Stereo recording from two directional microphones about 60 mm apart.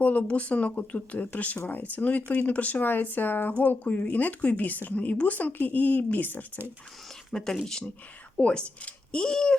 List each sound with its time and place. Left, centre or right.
0.0 s a woman's voice: left
7.3 s speech: centre
8.4 s speech: centre